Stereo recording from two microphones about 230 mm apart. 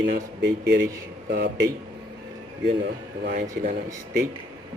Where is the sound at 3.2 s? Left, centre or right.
Right.